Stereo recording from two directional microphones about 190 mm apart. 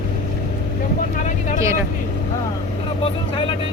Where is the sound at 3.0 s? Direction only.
30° left (ahead or behind).